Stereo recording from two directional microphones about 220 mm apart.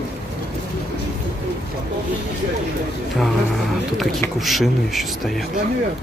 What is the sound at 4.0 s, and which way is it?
Speech, centre (ahead or behind).